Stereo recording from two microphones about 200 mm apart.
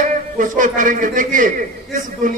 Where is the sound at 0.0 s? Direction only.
40° right (ahead or behind).